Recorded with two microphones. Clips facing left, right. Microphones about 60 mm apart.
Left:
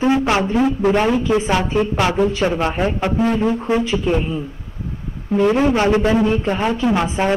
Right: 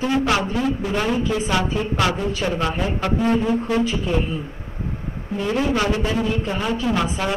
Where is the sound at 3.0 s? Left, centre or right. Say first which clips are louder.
Left 3 dB; left.